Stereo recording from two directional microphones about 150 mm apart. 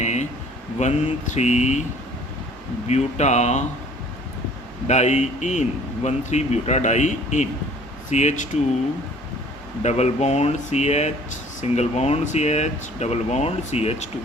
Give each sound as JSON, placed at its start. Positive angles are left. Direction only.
{"t": 0.0, "sound": "a sound", "side_deg": 50}
{"t": 0.8, "sound": "speech", "side_deg": 50}
{"t": 2.8, "sound": "speech", "side_deg": 50}
{"t": 4.9, "sound": "speech", "side_deg": 50}
{"t": 9.8, "sound": "speech", "side_deg": 50}